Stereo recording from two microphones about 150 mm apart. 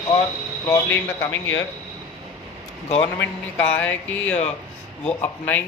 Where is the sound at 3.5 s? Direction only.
10° left (ahead or behind).